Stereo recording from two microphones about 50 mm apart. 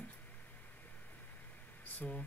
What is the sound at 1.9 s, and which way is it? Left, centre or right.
Speech, left.